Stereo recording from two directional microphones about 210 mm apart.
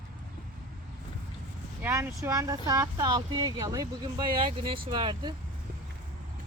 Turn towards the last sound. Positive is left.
turn(degrees=-20)  # may be behind; listen again after turning